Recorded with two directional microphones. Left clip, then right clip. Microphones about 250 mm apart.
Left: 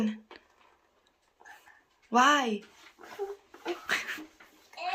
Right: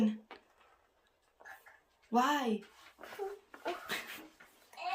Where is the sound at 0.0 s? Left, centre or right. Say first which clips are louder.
Left 1 dB; centre.